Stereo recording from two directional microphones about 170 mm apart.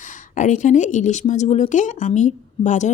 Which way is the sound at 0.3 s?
45° left (ahead or behind).